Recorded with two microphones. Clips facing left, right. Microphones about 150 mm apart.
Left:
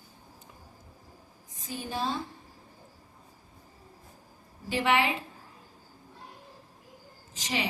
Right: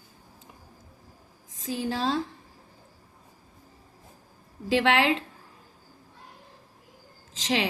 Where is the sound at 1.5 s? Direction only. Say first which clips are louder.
Right 5 dB; 90° right.